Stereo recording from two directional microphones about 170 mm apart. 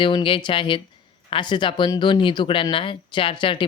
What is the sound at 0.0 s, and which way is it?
Speech, 30° left (ahead or behind).